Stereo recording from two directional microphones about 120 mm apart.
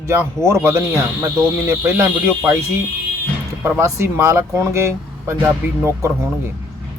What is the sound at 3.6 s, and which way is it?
Speech, 25° right (ahead or behind).